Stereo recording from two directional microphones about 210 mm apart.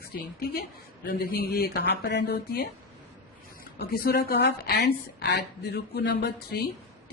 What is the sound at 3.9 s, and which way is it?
A woman's voice, 45° left (ahead or behind).